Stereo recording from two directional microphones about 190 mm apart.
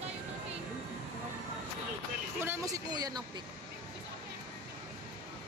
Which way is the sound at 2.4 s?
15° right (ahead or behind).